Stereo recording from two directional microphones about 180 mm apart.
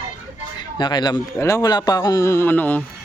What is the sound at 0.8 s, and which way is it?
A man's voice, 25° left (ahead or behind).